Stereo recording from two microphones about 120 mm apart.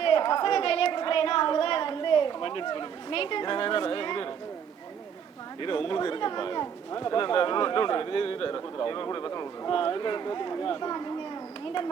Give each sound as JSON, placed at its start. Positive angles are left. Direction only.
{"t": 0.0, "sound": "a woman's voice", "side_deg": 45}
{"t": 5.5, "sound": "speech", "side_deg": 45}